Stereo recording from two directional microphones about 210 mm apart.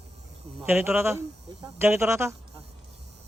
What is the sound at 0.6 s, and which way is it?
A man's voice, 10° right (ahead or behind).